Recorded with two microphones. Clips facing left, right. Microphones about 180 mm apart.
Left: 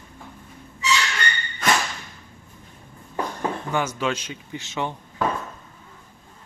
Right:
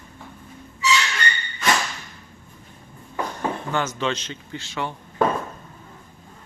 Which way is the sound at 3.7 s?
10° left (ahead or behind).